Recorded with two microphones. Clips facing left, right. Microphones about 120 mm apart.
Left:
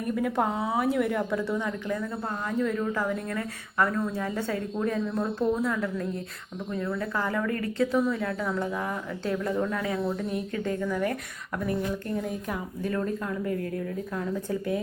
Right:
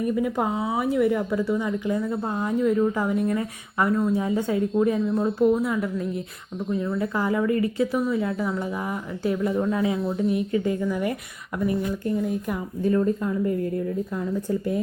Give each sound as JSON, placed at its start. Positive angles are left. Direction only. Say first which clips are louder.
{"t": 0.0, "sound": "a woman's voice", "louder": "right 3 dB", "side_deg": -5}
{"t": 12.9, "sound": "a woman's voice", "louder": "right 7 dB", "side_deg": -15}